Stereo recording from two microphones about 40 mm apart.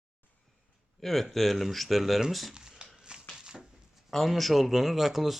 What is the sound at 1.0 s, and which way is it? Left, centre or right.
Speech, centre.